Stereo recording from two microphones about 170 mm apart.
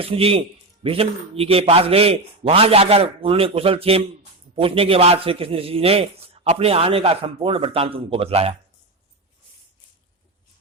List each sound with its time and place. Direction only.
0.0 s speech: 35° right (ahead or behind)